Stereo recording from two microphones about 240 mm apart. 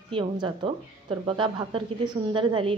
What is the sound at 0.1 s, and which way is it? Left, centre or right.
Speech, right.